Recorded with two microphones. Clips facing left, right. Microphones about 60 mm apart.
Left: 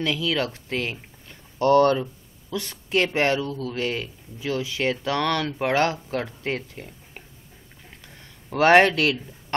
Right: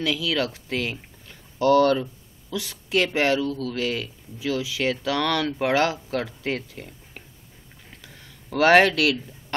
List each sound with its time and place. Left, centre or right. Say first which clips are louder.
0.1 s speech: even; centre
1.6 s a woman's voice: even; left
5.6 s speech: even; centre
8.6 s speech: left 1 dB; centre
8.9 s speech: right 1 dB; left